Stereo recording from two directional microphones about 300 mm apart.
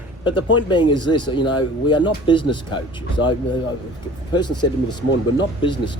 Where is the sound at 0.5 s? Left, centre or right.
Centre.